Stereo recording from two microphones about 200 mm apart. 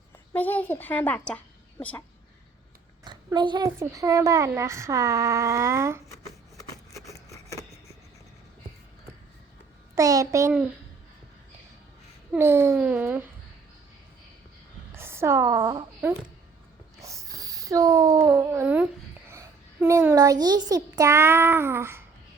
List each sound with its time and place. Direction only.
0.3 s speech: 10° left (ahead or behind)
3.0 s a woman's voice: 20° right (ahead or behind)
9.9 s a woman's voice: 15° right (ahead or behind)
12.3 s a woman's voice: 10° right (ahead or behind)
14.9 s a woman's voice: 10° right (ahead or behind)
17.0 s a sound: 15° right (ahead or behind)
19.3 s a child's voice: 15° right (ahead or behind)